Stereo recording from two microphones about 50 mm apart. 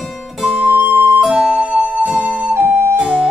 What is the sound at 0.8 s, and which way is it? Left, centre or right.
Music, right.